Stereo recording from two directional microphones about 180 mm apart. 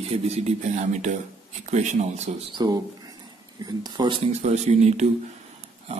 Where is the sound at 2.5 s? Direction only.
20° right (ahead or behind).